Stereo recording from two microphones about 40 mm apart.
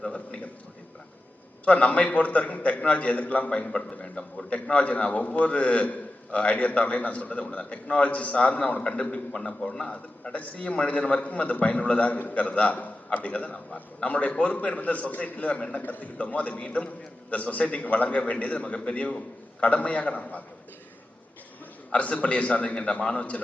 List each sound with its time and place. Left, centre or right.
1.6 s a man's voice: left
3.7 s a man's voice: centre; by 20.4 s left
21.9 s a man's voice: left